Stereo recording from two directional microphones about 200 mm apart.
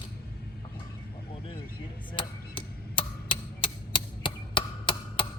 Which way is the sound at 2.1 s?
25° left (ahead or behind).